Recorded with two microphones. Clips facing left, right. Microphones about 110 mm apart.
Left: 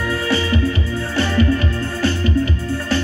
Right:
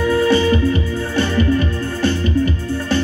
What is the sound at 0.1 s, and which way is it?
Music, 25° right (ahead or behind).